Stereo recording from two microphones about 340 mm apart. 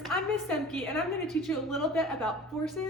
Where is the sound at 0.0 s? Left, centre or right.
Centre.